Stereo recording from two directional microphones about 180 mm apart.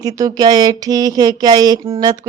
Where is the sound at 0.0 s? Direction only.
20° right (ahead or behind).